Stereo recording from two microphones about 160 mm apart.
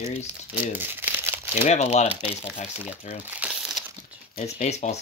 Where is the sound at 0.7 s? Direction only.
10° right (ahead or behind).